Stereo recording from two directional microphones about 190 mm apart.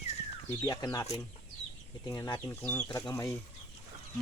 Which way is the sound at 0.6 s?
20° left (ahead or behind).